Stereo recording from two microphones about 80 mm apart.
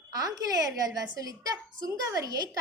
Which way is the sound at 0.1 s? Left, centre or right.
Right.